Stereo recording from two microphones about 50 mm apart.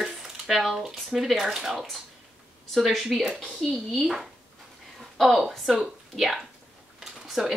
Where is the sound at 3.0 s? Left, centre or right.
Centre.